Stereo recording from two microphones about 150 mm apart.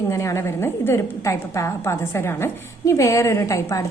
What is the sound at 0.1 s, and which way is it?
A woman's voice, 20° left (ahead or behind).